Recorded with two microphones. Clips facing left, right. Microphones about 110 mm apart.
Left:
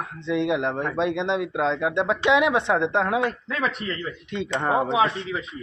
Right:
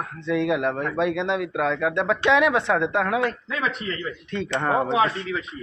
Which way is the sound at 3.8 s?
40° left (ahead or behind).